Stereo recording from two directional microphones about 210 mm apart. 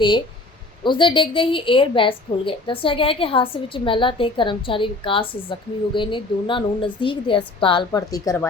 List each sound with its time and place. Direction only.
0.9 s a woman's voice: 25° left (ahead or behind)